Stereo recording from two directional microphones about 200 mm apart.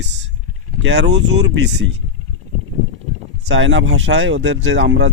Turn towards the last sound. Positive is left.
turn(degrees=-60)  # may be behind; listen again after turning